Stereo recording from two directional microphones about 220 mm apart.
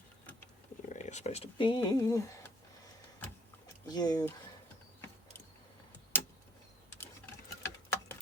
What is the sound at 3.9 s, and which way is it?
Speech, 20° left (ahead or behind).